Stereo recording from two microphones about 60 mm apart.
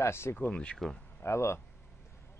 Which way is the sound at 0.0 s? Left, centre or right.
Left.